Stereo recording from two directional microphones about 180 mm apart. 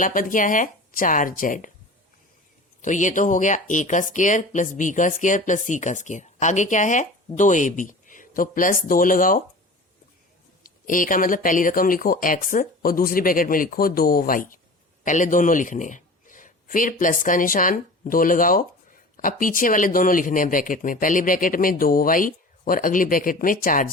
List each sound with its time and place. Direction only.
0.0 s a man's voice: 50° left (ahead or behind)
2.8 s a man's voice: 45° left (ahead or behind)
10.6 s a man's voice: 50° left (ahead or behind)